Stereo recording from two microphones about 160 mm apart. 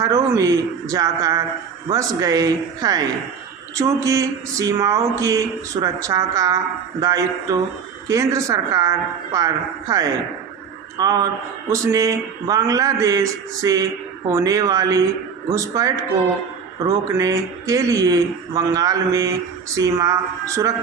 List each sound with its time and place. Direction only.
0.0 s speech: 20° right (ahead or behind)
10.9 s speech: 25° right (ahead or behind)